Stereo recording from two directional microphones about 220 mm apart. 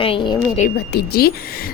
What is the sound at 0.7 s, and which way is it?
Speech, 45° left (ahead or behind).